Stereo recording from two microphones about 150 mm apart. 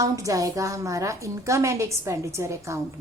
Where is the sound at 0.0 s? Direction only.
20° right (ahead or behind).